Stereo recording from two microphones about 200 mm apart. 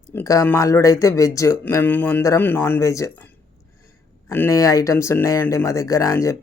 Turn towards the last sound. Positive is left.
turn(degrees=15)  # may be behind; listen again after turning